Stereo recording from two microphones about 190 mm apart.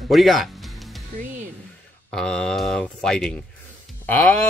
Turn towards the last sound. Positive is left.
turn(degrees=10)  # may be behind; listen again after turning